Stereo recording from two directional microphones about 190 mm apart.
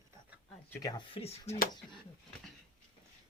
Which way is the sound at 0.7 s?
20° left (ahead or behind).